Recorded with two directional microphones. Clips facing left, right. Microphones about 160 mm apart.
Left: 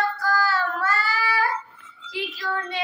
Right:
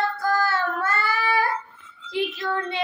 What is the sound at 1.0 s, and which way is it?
Child singing, 55° right (ahead or behind).